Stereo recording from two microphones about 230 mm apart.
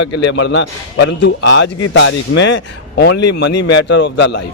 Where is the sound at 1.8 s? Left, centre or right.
Left.